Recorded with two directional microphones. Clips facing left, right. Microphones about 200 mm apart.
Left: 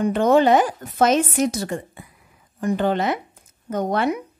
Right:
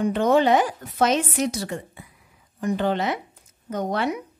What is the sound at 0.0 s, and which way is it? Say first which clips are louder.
Speech: left 3 dB; 50° left (ahead or behind).